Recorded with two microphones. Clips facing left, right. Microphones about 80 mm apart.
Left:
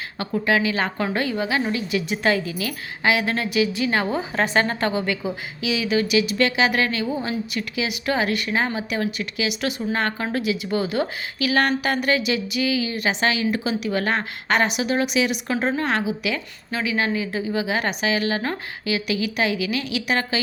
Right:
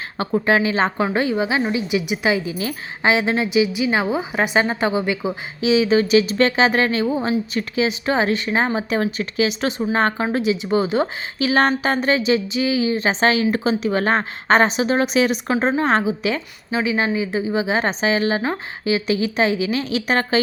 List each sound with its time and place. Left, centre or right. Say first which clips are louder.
0.2 s a woman's voice: right 3 dB; right